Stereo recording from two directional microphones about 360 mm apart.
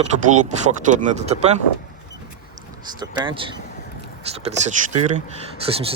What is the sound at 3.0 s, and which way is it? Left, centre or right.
Speech, centre.